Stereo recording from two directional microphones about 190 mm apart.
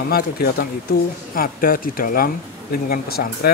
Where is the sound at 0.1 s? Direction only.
50° left (ahead or behind).